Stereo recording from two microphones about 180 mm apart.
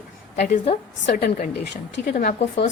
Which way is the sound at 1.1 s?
50° left (ahead or behind).